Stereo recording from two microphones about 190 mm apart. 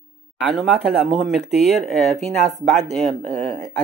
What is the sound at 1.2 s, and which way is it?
Speech, centre (ahead or behind).